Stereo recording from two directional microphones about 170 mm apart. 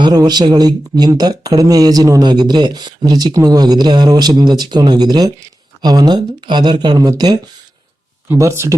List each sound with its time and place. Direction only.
0.0 s speech: 25° right (ahead or behind)